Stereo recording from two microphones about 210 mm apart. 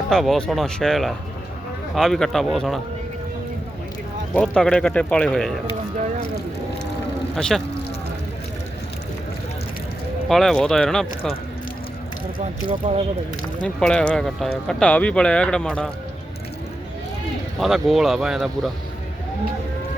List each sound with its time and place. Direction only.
0.1 s speech: centre (ahead or behind)
4.4 s speech: 5° left (ahead or behind)
7.3 s speech: centre (ahead or behind)
10.2 s speech: centre (ahead or behind)
12.8 s speech: 35° right (ahead or behind)
13.7 s speech: 5° left (ahead or behind)
17.6 s speech: centre (ahead or behind)